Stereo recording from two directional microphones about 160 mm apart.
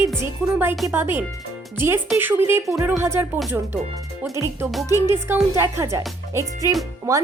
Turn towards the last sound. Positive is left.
turn(degrees=-20)  # may be behind; listen again after turning